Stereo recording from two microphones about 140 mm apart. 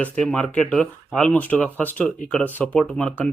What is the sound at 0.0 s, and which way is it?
A man's voice, 10° left (ahead or behind).